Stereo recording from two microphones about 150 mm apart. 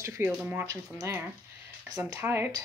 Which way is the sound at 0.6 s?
20° right (ahead or behind).